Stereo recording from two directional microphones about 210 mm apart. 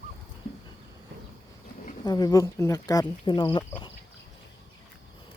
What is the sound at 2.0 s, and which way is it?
Speech, 20° left (ahead or behind).